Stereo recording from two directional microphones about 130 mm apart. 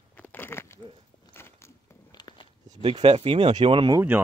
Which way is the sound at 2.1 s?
35° left (ahead or behind).